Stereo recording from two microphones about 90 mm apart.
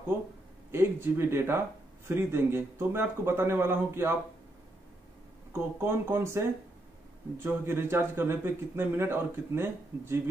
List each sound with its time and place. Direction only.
0.7 s a man's voice: 25° right (ahead or behind)
5.5 s a man's voice: 25° right (ahead or behind)